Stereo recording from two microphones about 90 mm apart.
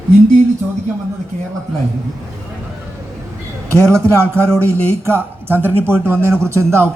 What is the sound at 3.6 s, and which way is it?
A man's voice, 30° right (ahead or behind).